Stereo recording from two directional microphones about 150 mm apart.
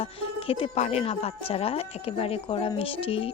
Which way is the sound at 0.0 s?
40° left (ahead or behind).